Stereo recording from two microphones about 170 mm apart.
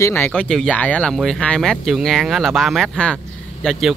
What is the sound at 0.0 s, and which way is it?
Speech, 15° left (ahead or behind).